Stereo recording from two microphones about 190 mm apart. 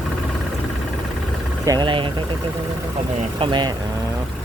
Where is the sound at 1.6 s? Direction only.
20° right (ahead or behind).